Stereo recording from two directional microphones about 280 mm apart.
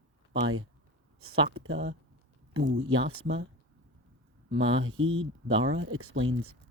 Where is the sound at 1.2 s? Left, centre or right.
Right.